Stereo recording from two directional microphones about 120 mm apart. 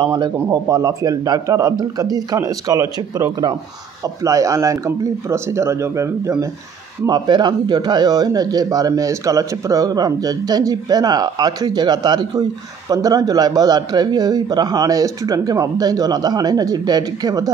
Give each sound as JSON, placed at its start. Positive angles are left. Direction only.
{"t": 0.0, "sound": "a man's voice", "side_deg": -35}
{"t": 7.1, "sound": "speech", "side_deg": -35}